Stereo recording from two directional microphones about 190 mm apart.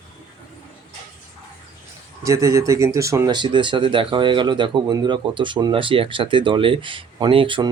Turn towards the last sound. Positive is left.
turn(degrees=-25)  # may be behind; listen again after turning